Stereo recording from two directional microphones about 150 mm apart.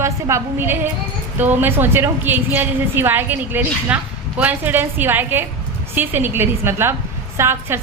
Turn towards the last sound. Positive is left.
turn(degrees=-15)  # may be behind; listen again after turning